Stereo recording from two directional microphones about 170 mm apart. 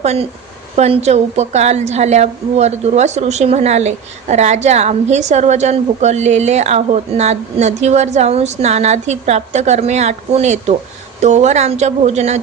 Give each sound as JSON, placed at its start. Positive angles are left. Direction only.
{"t": 0.0, "sound": "a woman's voice", "side_deg": -40}